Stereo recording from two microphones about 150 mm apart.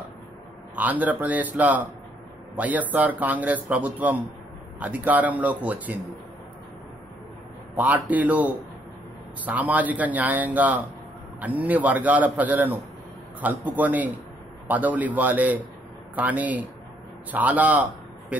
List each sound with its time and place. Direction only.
0.7 s a man's voice: 10° right (ahead or behind)
7.7 s a man's voice: 10° right (ahead or behind)